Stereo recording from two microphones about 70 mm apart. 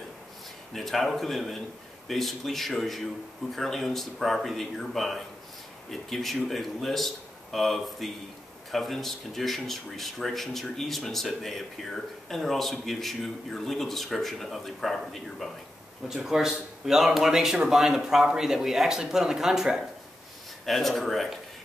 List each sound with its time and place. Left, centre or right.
0.7 s speech: centre
20.6 s speech: centre